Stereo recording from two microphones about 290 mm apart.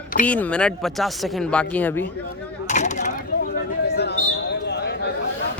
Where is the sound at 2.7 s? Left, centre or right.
Left.